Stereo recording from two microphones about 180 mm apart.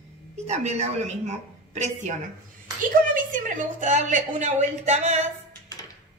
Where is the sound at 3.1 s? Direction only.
45° right (ahead or behind).